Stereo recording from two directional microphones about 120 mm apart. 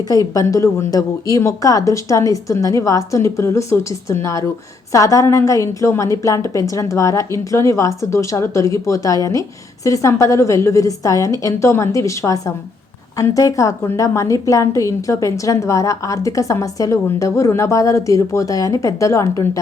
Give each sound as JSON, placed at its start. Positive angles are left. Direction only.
{"t": 0.3, "sound": "a woman's voice", "side_deg": 25}